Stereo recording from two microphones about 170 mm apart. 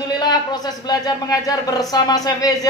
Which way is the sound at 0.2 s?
25° left (ahead or behind).